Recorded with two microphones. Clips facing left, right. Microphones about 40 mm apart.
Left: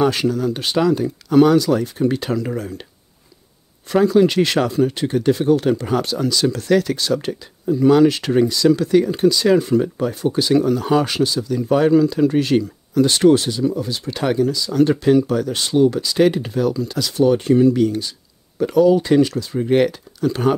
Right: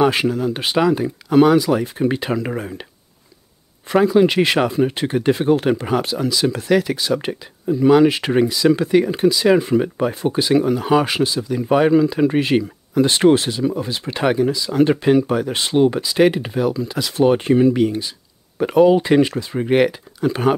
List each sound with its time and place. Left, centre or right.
0.0 s speech: right
3.9 s speech: centre
17.2 s speech: right
18.6 s speech: right